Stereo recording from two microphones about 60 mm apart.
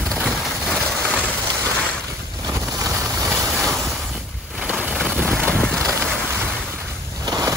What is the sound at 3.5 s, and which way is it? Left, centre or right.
Waves, centre.